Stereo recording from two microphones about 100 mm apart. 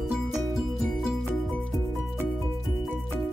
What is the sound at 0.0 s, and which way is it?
Music, centre (ahead or behind).